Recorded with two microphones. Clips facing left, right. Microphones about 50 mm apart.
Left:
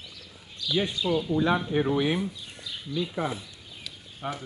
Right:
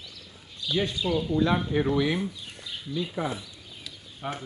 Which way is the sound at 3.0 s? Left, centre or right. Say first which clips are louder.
Left 1 dB; centre.